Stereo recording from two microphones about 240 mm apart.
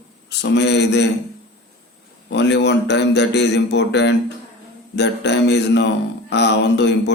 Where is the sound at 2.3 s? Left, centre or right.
Left.